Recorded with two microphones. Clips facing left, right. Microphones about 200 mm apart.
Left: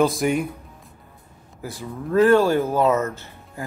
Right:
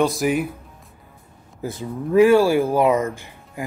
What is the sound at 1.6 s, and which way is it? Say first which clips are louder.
Speech: right 4 dB; 20° right (ahead or behind).